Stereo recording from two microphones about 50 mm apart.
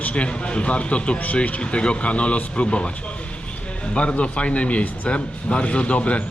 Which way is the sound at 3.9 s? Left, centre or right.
Left.